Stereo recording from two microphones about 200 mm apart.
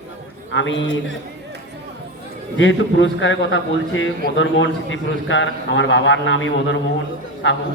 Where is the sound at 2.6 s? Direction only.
70° left (ahead or behind).